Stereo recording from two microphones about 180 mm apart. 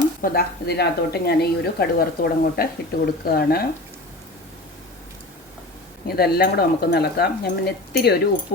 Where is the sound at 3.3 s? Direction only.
55° left (ahead or behind).